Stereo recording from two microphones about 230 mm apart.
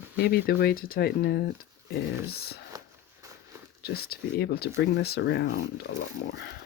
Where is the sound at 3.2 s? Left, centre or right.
Centre.